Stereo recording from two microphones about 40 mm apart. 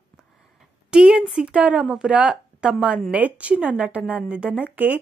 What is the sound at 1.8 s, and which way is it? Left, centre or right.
Speech, centre.